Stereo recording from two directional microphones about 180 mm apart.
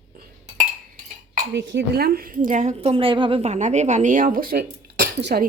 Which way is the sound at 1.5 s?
70° right (ahead or behind).